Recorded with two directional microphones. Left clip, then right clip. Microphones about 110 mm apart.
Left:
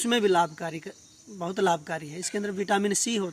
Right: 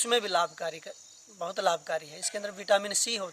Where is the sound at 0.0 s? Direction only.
45° right (ahead or behind).